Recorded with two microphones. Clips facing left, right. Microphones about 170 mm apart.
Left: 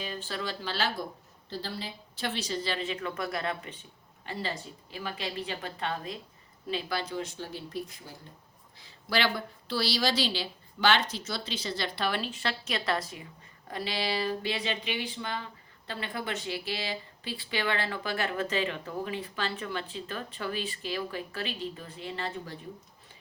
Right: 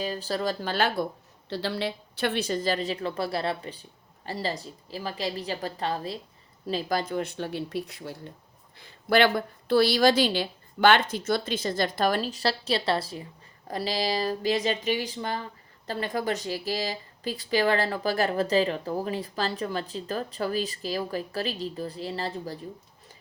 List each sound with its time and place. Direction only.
0.0 s a woman's voice: 40° right (ahead or behind); by 1.0 s 55° right (ahead or behind)
1.5 s speech: 75° right (ahead or behind)
8.8 s a woman's voice: 55° right (ahead or behind); by 22.5 s 35° right (ahead or behind)